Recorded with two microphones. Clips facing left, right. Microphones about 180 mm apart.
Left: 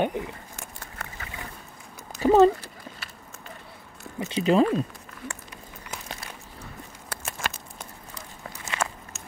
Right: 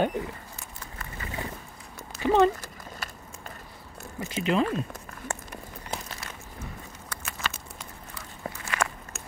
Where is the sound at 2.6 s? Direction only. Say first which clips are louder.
Right 2 dB; 45° right (ahead or behind).